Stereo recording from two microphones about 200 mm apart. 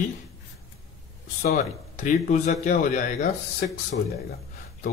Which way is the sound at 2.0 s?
35° left (ahead or behind).